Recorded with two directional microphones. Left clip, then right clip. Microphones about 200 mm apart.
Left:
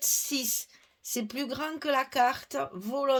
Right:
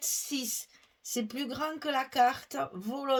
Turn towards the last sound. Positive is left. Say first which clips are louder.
# left 5 dB
turn(degrees=40)  # may be behind; listen again after turning